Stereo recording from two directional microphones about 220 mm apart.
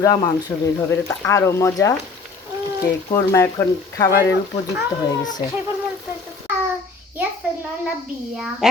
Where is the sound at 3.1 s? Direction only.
10° left (ahead or behind).